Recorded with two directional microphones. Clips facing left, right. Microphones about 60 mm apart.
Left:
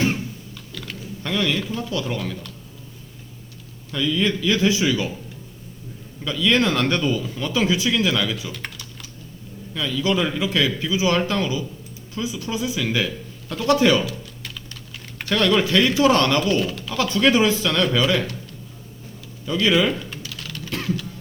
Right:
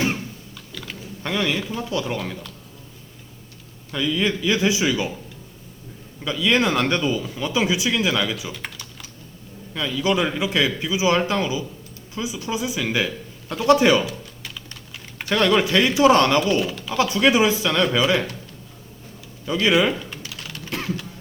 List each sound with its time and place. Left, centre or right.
0.5 s typing: centre
1.2 s speech: right
3.9 s speech: centre
6.2 s speech: right
9.7 s speech: right
14.9 s typing: centre
15.4 s speech: right
16.6 s speech: centre
16.9 s speech: centre
19.5 s speech: right
20.3 s typing: right